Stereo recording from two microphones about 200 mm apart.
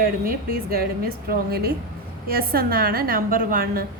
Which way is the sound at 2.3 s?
50° right (ahead or behind).